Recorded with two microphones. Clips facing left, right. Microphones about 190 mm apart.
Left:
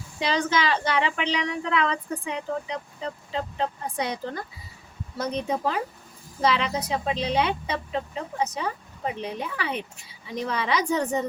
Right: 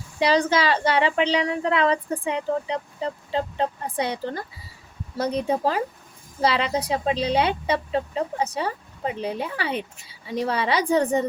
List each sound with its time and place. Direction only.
0.2 s speech: 35° right (ahead or behind)
3.9 s speech: 30° right (ahead or behind)